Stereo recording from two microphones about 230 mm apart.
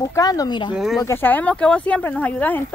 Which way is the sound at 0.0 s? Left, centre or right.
Centre.